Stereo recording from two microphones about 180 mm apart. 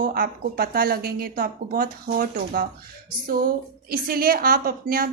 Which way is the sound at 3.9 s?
55° right (ahead or behind).